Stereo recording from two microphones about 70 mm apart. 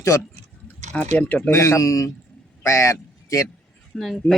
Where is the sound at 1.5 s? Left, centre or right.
Left.